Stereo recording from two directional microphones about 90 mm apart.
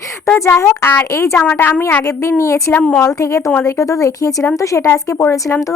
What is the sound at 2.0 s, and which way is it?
Speech, 35° left (ahead or behind).